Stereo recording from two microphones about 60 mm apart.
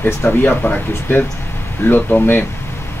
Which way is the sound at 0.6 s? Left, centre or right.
Left.